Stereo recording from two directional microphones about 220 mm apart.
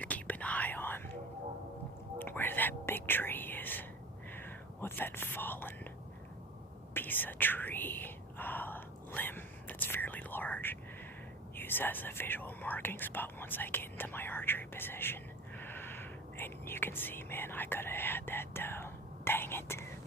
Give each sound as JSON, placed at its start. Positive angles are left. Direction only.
{"t": 0.0, "sound": "whispering", "side_deg": 5}
{"t": 2.1, "sound": "whispering", "side_deg": 10}
{"t": 6.9, "sound": "whispering", "side_deg": 10}